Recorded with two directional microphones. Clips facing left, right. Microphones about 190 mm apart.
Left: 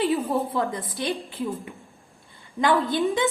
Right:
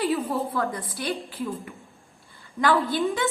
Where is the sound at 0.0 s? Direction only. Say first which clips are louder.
Left 2 dB; 20° left (ahead or behind).